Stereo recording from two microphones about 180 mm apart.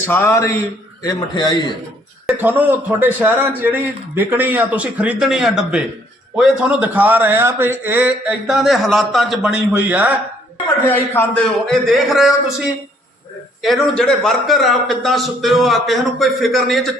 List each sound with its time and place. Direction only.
0.1 s a man's voice: 15° left (ahead or behind)
2.2 s a man's voice: 10° right (ahead or behind)
10.8 s a man's voice: 10° left (ahead or behind)
11.7 s a man's voice: centre (ahead or behind)